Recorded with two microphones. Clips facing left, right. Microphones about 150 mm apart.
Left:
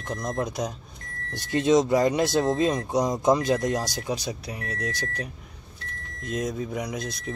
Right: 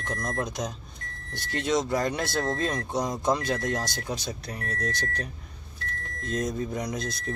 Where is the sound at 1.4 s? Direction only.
20° left (ahead or behind).